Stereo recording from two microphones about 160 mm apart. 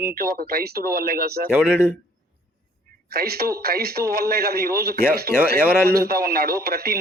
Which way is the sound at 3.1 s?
75° right (ahead or behind).